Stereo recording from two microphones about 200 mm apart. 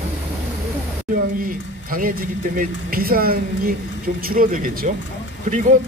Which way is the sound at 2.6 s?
45° right (ahead or behind).